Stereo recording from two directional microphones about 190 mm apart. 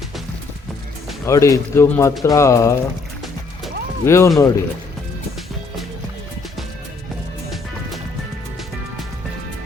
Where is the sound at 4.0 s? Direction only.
15° left (ahead or behind).